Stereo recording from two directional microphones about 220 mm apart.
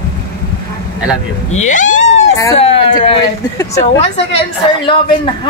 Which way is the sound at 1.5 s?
35° left (ahead or behind).